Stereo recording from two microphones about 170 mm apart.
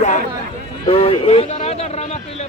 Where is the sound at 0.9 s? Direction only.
35° left (ahead or behind).